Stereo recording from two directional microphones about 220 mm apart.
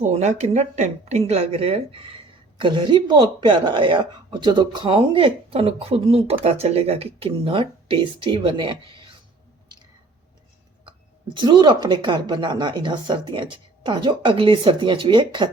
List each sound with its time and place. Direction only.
0.0 s speech: 30° right (ahead or behind)
11.3 s speech: 20° right (ahead or behind)